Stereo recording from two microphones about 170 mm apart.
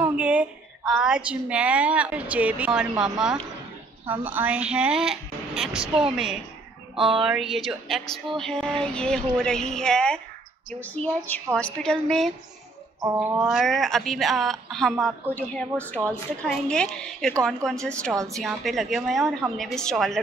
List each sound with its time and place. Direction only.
0.0 s a woman's voice: 10° right (ahead or behind)
7.0 s speech: 30° right (ahead or behind)
7.2 s a woman's voice: centre (ahead or behind)
13.0 s speech: 15° right (ahead or behind)
13.5 s a woman's voice: centre (ahead or behind)